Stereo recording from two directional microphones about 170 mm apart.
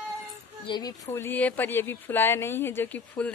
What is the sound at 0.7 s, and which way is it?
Speech, 25° left (ahead or behind).